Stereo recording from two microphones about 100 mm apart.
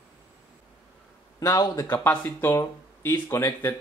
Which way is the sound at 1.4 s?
40° left (ahead or behind).